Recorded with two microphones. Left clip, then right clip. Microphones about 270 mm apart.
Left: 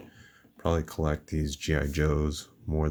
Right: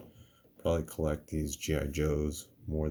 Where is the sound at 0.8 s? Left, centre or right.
Left.